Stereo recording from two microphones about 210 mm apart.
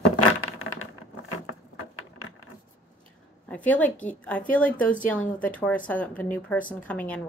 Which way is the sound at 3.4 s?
5° left (ahead or behind).